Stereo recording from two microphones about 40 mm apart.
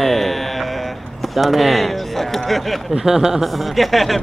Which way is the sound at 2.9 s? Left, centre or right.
Centre.